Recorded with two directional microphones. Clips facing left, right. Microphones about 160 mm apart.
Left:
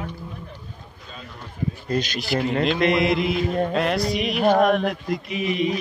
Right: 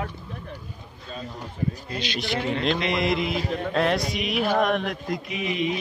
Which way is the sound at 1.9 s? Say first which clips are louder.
Left 6 dB; 45° left (ahead or behind).